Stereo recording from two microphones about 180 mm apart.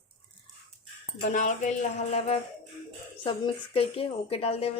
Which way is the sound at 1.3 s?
45° left (ahead or behind).